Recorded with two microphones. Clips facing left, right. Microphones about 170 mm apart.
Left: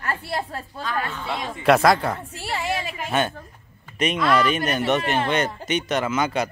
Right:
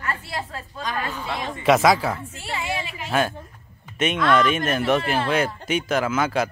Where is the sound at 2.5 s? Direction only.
40° left (ahead or behind).